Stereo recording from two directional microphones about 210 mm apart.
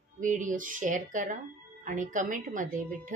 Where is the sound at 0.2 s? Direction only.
40° right (ahead or behind).